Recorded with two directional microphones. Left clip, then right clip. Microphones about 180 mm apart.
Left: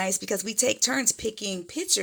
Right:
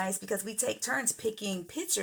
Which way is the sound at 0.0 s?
40° left (ahead or behind).